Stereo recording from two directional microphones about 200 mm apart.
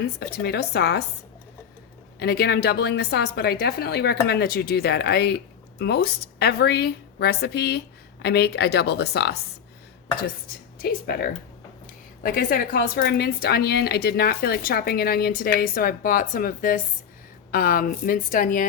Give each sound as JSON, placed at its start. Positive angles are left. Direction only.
{"t": 0.0, "sound": "a woman's voice", "side_deg": 55}
{"t": 2.1, "sound": "a woman's voice", "side_deg": 55}
{"t": 10.8, "sound": "a woman's voice", "side_deg": 50}